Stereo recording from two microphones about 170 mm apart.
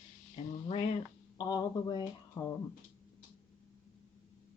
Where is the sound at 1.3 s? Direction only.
25° left (ahead or behind).